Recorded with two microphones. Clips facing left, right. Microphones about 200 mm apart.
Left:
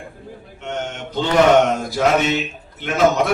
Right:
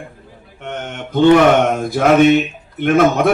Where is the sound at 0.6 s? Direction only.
55° right (ahead or behind).